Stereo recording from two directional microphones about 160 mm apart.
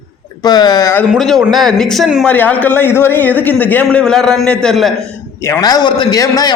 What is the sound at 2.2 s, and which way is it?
A man's voice, 10° left (ahead or behind).